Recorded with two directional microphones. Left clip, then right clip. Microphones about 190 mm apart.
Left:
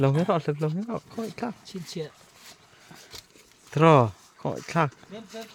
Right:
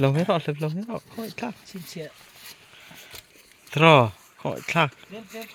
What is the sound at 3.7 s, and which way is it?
Speech, 5° left (ahead or behind).